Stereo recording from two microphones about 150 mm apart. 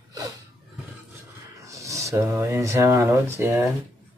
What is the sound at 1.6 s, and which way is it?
Speech, 20° right (ahead or behind).